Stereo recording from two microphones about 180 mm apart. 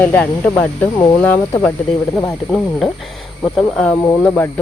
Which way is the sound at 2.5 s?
10° left (ahead or behind).